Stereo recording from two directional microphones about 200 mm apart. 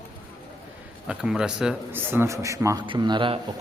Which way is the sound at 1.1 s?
5° right (ahead or behind).